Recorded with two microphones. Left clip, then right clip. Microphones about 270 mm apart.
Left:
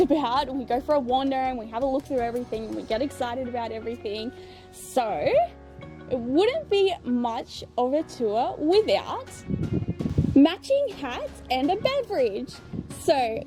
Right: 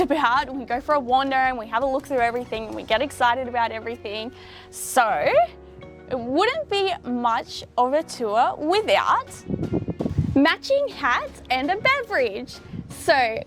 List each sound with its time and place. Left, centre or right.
0.0 s a woman's voice: right
9.9 s music: right
10.3 s speech: right
10.7 s a woman's voice: right